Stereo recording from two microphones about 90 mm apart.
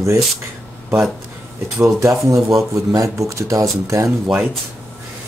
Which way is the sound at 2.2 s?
35° right (ahead or behind).